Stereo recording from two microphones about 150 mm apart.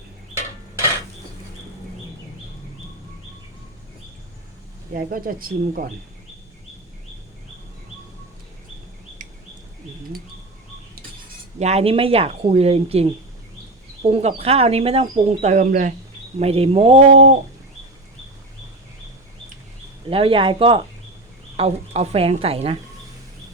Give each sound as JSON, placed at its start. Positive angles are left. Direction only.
{"t": 4.9, "sound": "speech", "side_deg": -70}
{"t": 11.6, "sound": "speech", "side_deg": -45}
{"t": 16.4, "sound": "speech", "side_deg": -40}
{"t": 20.1, "sound": "speech", "side_deg": -35}